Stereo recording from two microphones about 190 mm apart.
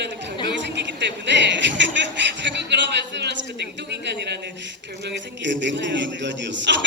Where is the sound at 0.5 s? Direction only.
70° right (ahead or behind).